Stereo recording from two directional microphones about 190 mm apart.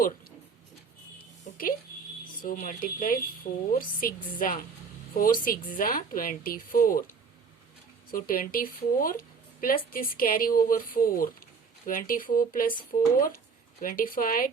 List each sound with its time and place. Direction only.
1.5 s smoke detector: 40° left (ahead or behind)
2.4 s speech: 45° left (ahead or behind)
8.1 s speech: 50° left (ahead or behind)